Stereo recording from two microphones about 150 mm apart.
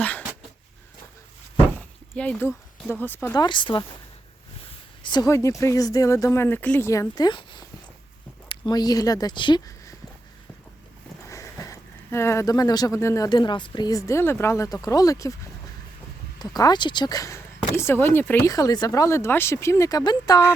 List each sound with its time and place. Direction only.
2.1 s speech: 10° left (ahead or behind)
3.3 s speech: 30° left (ahead or behind)
5.0 s speech: 30° left (ahead or behind)
11.3 s speech: 20° left (ahead or behind)
16.4 s speech: 25° left (ahead or behind)